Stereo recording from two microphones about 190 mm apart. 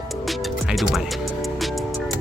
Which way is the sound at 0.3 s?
Centre (ahead or behind).